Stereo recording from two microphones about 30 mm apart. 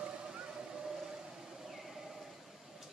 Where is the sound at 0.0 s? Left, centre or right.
Right.